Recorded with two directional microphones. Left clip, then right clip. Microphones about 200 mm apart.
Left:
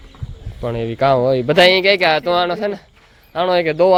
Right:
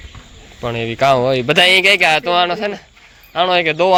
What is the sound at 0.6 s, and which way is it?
Speech, 20° left (ahead or behind).